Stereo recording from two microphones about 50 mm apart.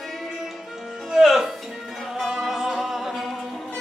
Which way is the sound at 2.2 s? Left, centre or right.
Centre.